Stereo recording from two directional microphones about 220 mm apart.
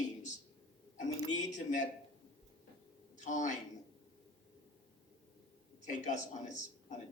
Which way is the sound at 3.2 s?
35° left (ahead or behind).